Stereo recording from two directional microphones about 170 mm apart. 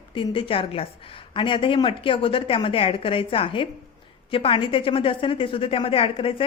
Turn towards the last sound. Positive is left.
turn(degrees=30)  # may be behind; listen again after turning